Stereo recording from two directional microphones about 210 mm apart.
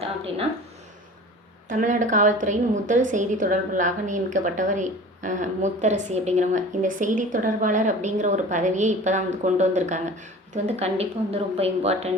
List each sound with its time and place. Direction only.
1.7 s a woman's voice: 35° right (ahead or behind)